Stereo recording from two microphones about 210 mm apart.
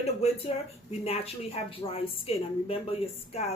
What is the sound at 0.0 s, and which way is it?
Speech, 30° left (ahead or behind).